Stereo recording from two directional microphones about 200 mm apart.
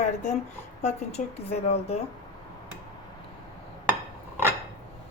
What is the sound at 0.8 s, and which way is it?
A woman's voice, 35° left (ahead or behind).